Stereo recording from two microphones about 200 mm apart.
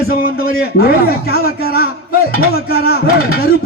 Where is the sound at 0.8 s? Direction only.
50° left (ahead or behind).